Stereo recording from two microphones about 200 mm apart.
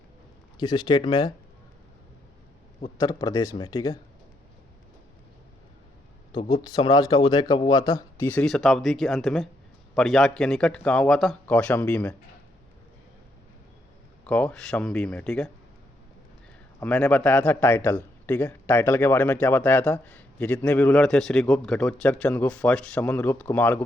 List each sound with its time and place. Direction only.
0.6 s speech: 20° left (ahead or behind)
3.0 s speech: 20° left (ahead or behind)
6.3 s a man's voice: 20° left (ahead or behind)
14.3 s a man's voice: 5° left (ahead or behind)
16.8 s a man's voice: 5° left (ahead or behind)